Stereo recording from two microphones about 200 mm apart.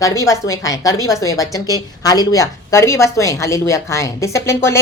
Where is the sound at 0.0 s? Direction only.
15° left (ahead or behind).